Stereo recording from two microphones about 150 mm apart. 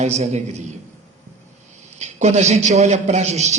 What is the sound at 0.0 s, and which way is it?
Speech, 50° right (ahead or behind).